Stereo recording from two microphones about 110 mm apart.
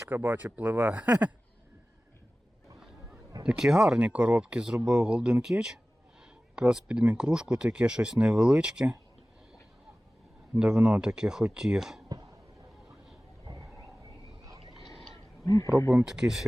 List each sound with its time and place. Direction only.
0.1 s speech: 15° right (ahead or behind)
3.4 s speech: 5° right (ahead or behind)
10.6 s speech: 10° right (ahead or behind)
13.4 s a sound: 35° right (ahead or behind)
15.4 s speech: 30° left (ahead or behind)
15.9 s speech: 10° right (ahead or behind)